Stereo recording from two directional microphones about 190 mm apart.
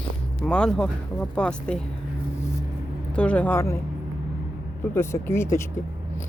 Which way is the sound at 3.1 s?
5° left (ahead or behind).